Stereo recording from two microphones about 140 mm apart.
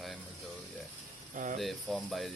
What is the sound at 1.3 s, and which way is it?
Speech, 65° right (ahead or behind).